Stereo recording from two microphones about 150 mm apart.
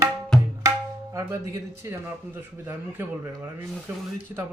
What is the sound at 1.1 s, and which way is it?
A man's voice, 20° right (ahead or behind).